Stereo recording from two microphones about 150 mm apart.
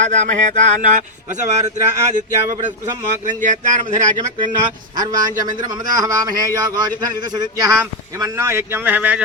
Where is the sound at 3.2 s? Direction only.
55° right (ahead or behind).